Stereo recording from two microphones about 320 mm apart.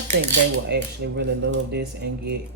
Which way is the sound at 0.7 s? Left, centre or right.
Right.